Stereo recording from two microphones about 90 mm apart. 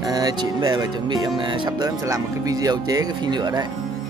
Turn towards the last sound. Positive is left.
turn(degrees=-50)  # may be behind; listen again after turning